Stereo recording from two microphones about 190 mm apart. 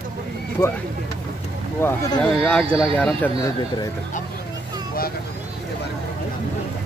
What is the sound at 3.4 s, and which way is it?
Speech, 20° left (ahead or behind).